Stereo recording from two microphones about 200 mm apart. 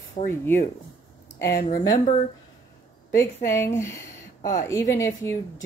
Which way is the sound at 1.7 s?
20° left (ahead or behind).